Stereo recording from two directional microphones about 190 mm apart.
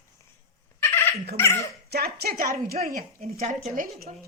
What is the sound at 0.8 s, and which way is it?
Dog, 10° left (ahead or behind).